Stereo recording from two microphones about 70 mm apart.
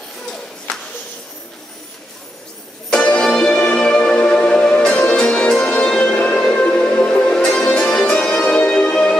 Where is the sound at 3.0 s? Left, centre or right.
Centre.